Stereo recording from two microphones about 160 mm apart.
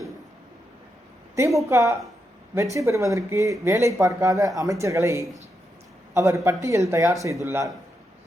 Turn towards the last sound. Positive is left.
turn(degrees=-15)  # may be behind; listen again after turning